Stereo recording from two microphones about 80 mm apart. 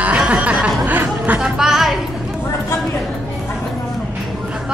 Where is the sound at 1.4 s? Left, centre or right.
Centre.